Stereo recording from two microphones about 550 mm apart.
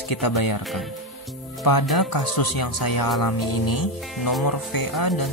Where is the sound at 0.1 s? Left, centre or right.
Left.